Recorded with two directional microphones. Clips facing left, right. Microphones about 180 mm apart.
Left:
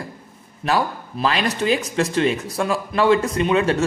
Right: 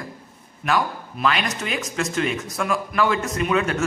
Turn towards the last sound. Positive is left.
turn(degrees=30)  # may be behind; listen again after turning